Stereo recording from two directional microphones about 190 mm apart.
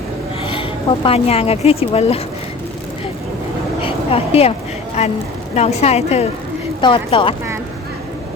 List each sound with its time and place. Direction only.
0.4 s speech: 25° left (ahead or behind)
3.8 s a woman's voice: 30° left (ahead or behind)